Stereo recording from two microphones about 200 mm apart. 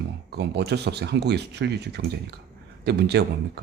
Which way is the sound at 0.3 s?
55° right (ahead or behind).